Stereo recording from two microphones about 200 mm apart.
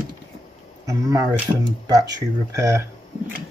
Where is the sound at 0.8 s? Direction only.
15° right (ahead or behind).